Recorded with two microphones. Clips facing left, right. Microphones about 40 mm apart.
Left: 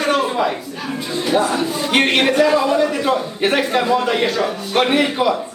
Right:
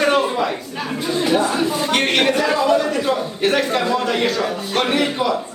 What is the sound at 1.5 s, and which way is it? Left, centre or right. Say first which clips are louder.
Speech: right 1 dB; centre.